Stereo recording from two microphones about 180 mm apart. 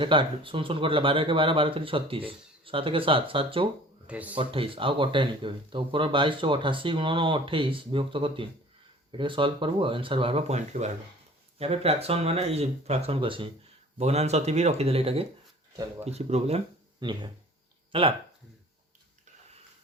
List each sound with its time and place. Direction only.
0.0 s speech: 30° right (ahead or behind)
4.0 s speech: 10° right (ahead or behind)
4.4 s speech: 30° right (ahead or behind)